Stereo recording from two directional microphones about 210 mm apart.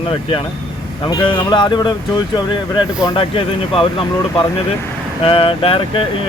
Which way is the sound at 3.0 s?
25° left (ahead or behind).